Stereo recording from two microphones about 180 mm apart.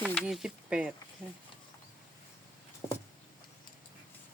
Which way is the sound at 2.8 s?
15° left (ahead or behind).